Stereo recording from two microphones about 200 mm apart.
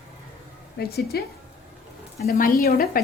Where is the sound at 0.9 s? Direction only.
50° left (ahead or behind).